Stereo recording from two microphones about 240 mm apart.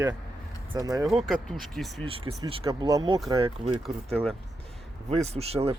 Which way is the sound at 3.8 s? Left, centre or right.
Centre.